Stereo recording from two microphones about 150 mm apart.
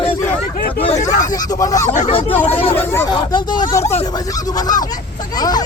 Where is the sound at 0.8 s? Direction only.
55° left (ahead or behind).